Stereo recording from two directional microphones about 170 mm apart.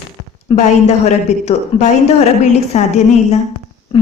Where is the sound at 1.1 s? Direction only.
40° left (ahead or behind).